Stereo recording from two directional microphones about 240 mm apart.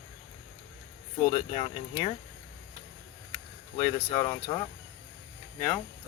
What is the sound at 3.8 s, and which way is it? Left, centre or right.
Speech, centre.